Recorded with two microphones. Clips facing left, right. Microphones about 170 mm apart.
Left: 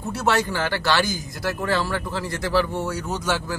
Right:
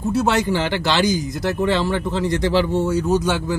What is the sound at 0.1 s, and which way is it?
Speech, 20° right (ahead or behind).